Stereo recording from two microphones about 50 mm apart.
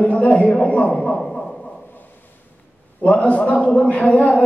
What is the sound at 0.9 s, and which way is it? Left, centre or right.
Speech, centre.